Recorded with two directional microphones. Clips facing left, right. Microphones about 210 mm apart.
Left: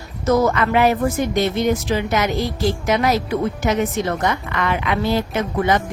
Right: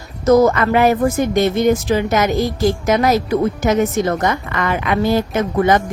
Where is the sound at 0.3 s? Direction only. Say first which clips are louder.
Right 5 dB; 40° right (ahead or behind).